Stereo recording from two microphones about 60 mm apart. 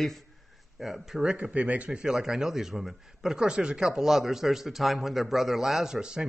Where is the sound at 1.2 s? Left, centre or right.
Right.